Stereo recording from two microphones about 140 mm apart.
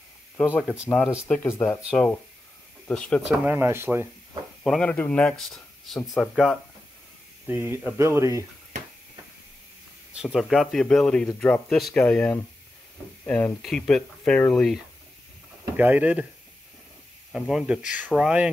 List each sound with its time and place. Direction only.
0.6 s speech: 5° right (ahead or behind)
0.8 s speech: 5° left (ahead or behind)
3.3 s speech: 15° right (ahead or behind)
4.6 s speech: 5° left (ahead or behind)
7.4 s speech: 15° right (ahead or behind)
10.2 s speech: centre (ahead or behind)
15.7 s speech: 10° right (ahead or behind)
17.3 s speech: 5° right (ahead or behind)